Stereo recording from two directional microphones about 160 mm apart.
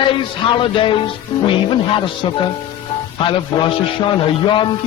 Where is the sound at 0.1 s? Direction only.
30° left (ahead or behind).